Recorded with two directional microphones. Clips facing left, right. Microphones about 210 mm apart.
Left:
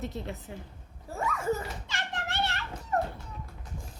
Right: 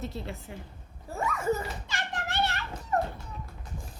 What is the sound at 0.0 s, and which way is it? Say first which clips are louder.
Speech: even; 15° left (ahead or behind).